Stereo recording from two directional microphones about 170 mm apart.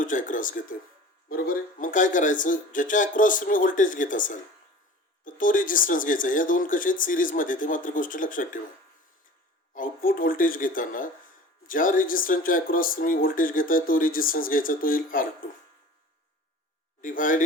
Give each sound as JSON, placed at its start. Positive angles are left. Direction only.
{"t": 0.0, "sound": "speech", "side_deg": 50}
{"t": 9.7, "sound": "speech", "side_deg": 55}
{"t": 17.0, "sound": "speech", "side_deg": 50}